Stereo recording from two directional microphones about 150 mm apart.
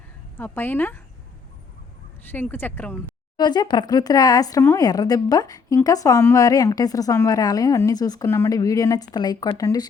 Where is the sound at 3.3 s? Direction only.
30° left (ahead or behind).